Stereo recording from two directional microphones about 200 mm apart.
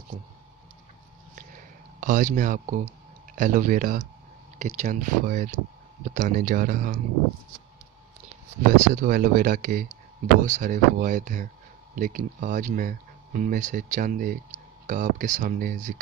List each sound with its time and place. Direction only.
2.0 s speech: 40° right (ahead or behind)
8.7 s speech: 40° right (ahead or behind)